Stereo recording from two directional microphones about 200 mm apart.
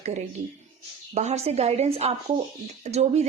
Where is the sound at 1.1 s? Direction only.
35° right (ahead or behind).